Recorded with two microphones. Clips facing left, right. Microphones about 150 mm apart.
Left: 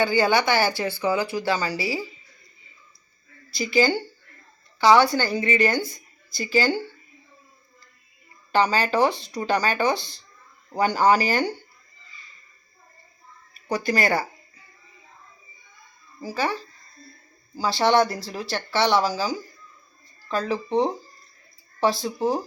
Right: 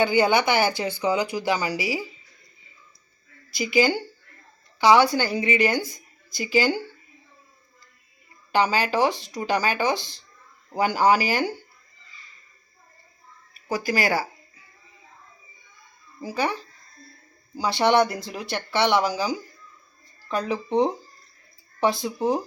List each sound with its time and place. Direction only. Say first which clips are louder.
0.0 s speech: right 1 dB; 20° right (ahead or behind)
3.5 s speech: even; 15° right (ahead or behind)
8.5 s speech: left 1 dB; 10° right (ahead or behind)
13.5 s speech: left 1 dB; 5° right (ahead or behind)
16.2 s speech: even; 15° right (ahead or behind)